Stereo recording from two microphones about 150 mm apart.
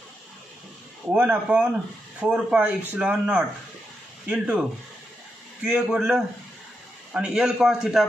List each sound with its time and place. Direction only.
1.1 s a man's voice: 10° right (ahead or behind)